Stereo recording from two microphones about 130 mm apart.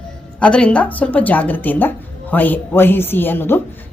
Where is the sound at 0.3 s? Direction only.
10° left (ahead or behind).